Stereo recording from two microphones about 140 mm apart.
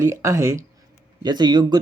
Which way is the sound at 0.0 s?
20° right (ahead or behind).